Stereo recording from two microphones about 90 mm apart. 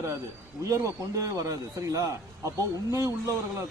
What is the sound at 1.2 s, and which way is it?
Speech, 35° right (ahead or behind).